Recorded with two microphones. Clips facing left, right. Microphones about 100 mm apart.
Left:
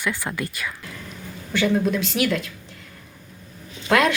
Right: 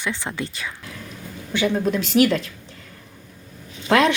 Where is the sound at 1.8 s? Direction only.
35° right (ahead or behind).